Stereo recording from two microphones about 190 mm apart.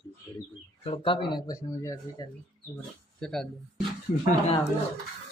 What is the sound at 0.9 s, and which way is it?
Speech, 25° left (ahead or behind).